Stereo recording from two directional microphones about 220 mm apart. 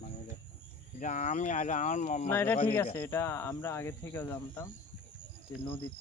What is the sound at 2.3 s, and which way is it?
Speech, 10° left (ahead or behind).